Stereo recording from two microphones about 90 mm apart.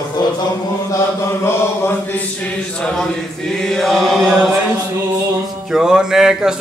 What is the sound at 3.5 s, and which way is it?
Speech, 5° left (ahead or behind).